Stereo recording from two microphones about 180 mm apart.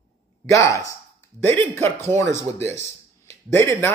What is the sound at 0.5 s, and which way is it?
Speech, 15° left (ahead or behind).